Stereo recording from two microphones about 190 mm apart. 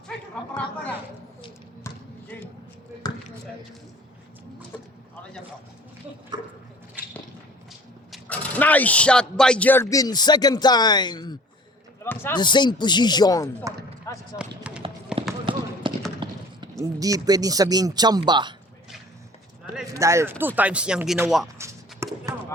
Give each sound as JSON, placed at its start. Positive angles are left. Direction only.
{"t": 0.5, "sound": "a sound", "side_deg": 5}
{"t": 8.1, "sound": "speech", "side_deg": 10}
{"t": 12.0, "sound": "a man's voice", "side_deg": 10}
{"t": 12.4, "sound": "speech", "side_deg": 25}
{"t": 14.1, "sound": "basketball bounce", "side_deg": 15}
{"t": 14.7, "sound": "run", "side_deg": -5}
{"t": 15.5, "sound": "basketball bounce", "side_deg": -25}
{"t": 15.9, "sound": "a sound", "side_deg": -25}
{"t": 16.8, "sound": "speech", "side_deg": -20}
{"t": 19.9, "sound": "speech", "side_deg": -15}
{"t": 21.6, "sound": "a sound", "side_deg": -15}